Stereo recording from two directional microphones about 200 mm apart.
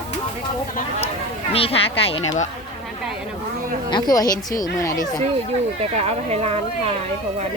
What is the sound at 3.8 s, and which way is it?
A woman's voice, 20° left (ahead or behind).